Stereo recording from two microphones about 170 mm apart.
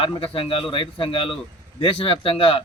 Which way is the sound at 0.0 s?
30° left (ahead or behind).